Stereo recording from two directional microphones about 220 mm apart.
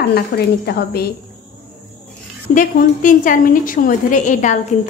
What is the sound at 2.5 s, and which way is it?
A woman's voice, 35° left (ahead or behind).